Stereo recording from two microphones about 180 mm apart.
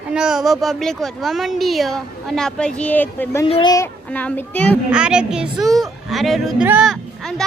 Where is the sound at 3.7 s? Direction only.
10° left (ahead or behind).